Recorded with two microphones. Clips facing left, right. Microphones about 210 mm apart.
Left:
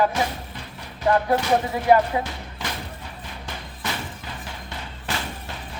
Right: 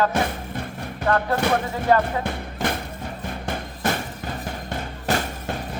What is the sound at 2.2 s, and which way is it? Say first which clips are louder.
Music: right 5 dB; 55° right (ahead or behind).